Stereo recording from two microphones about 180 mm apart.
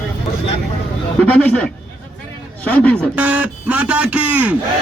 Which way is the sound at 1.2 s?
5° left (ahead or behind).